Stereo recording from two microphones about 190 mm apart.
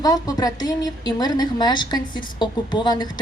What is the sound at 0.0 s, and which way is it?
A woman's voice, 20° left (ahead or behind).